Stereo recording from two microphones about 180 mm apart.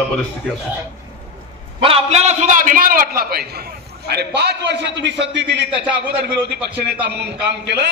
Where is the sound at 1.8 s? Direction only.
35° right (ahead or behind).